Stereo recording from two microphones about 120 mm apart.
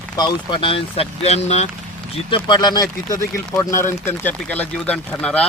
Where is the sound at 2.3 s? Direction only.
40° left (ahead or behind).